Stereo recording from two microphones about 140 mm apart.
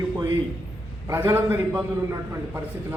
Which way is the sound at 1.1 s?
15° right (ahead or behind).